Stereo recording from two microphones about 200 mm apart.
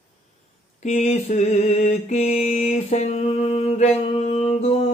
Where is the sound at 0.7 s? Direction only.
35° left (ahead or behind).